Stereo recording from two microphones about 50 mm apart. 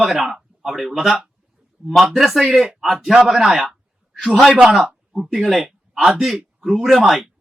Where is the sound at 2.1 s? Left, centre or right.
Centre.